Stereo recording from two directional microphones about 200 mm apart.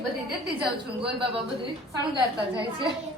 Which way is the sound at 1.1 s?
25° right (ahead or behind).